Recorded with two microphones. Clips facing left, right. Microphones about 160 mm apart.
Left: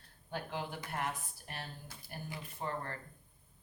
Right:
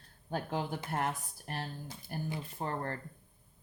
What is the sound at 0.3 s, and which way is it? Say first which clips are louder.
Speech: right 5 dB; 45° right (ahead or behind).